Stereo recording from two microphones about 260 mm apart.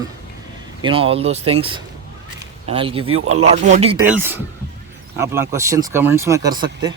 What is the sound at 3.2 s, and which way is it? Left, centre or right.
Speech, right.